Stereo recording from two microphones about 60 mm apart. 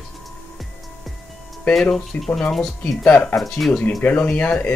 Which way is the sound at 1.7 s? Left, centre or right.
Centre.